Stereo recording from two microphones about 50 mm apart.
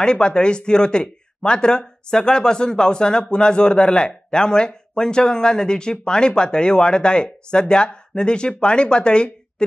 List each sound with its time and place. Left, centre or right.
0.0 s speech: centre